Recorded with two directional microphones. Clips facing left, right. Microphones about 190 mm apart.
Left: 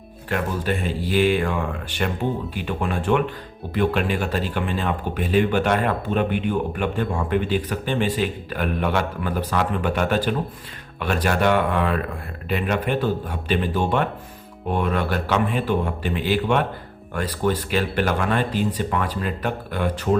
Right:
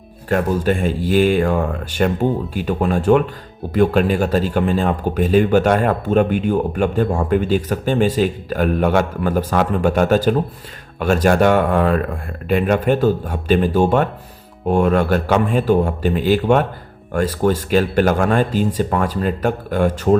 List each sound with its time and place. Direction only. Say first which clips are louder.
0.3 s a man's voice: right 7 dB; 45° right (ahead or behind)